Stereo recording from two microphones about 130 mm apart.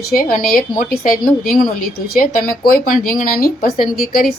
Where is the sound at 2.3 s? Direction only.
90° left.